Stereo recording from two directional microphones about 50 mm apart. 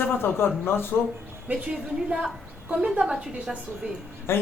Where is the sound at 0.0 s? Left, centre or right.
Left.